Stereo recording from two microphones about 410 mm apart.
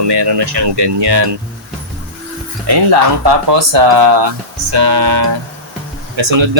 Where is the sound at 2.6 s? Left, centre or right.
Right.